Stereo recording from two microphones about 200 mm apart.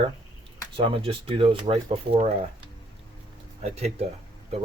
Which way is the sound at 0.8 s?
25° right (ahead or behind).